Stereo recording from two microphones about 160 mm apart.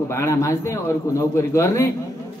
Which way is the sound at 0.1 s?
20° left (ahead or behind).